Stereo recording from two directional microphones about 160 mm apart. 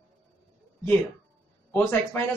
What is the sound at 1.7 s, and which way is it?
Speech, 15° left (ahead or behind).